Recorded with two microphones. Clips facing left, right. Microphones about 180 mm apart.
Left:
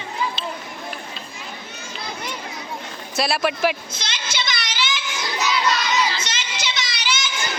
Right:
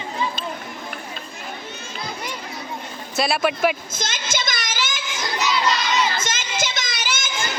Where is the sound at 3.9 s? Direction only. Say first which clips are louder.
Right 3 dB; 45° right (ahead or behind).